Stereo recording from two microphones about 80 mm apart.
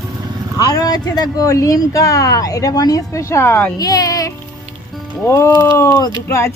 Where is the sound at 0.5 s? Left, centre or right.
Left.